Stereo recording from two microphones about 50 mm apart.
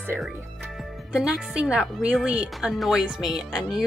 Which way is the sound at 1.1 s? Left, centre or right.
Centre.